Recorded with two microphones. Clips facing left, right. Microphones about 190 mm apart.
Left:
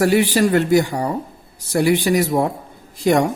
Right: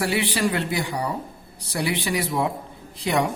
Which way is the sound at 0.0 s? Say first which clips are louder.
Left 8 dB; 45° left (ahead or behind).